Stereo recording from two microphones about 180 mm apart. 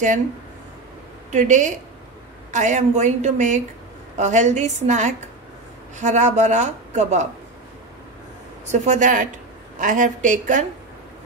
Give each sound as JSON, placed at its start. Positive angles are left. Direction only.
{"t": 1.3, "sound": "a woman's voice", "side_deg": -45}
{"t": 8.7, "sound": "a woman's voice", "side_deg": -40}